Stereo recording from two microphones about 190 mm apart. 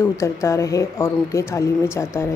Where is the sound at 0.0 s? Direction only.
15° left (ahead or behind).